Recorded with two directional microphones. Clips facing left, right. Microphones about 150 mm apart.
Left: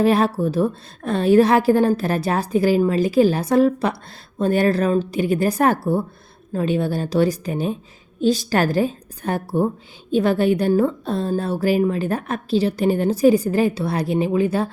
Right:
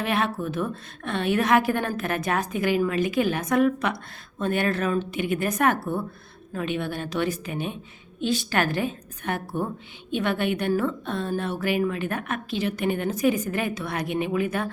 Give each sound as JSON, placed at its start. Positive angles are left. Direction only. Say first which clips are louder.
{"t": 0.0, "sound": "a woman's voice", "louder": "left 9 dB", "side_deg": 35}